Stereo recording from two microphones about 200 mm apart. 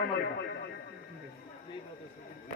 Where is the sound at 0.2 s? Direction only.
55° left (ahead or behind).